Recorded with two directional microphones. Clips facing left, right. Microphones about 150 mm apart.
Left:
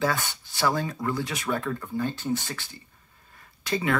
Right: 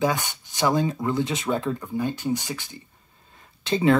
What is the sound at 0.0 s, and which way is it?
Speech, 20° right (ahead or behind).